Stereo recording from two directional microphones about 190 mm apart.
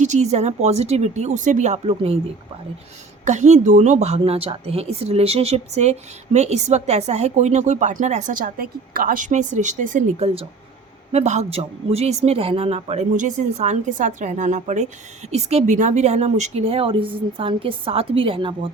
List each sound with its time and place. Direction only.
0.0 s speech: 40° right (ahead or behind)
3.2 s speech: 40° right (ahead or behind)